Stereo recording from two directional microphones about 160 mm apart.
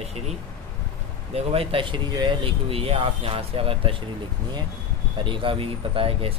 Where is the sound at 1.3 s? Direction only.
35° right (ahead or behind).